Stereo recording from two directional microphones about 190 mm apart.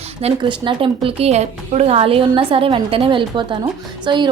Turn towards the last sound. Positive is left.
turn(degrees=-25)  # may be behind; listen again after turning